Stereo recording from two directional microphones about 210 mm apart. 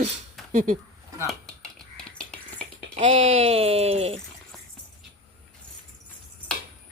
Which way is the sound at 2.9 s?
35° right (ahead or behind).